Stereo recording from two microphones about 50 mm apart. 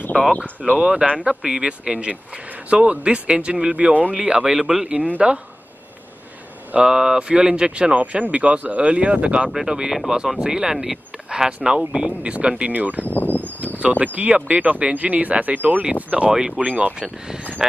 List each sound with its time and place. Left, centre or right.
0.1 s speech: centre
0.7 s speech: centre
4.8 s speech: right
6.7 s speech: centre; by 13.0 s right
13.0 s speech: left
13.9 s speech: right
15.8 s speech: right
16.6 s speech: right
17.6 s speech: centre